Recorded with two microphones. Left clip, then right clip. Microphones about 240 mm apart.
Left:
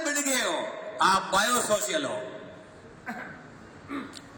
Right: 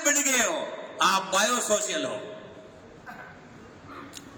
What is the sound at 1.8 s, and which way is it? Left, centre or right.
Speech, right.